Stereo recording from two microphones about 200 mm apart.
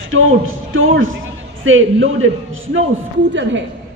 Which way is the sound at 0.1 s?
85° right.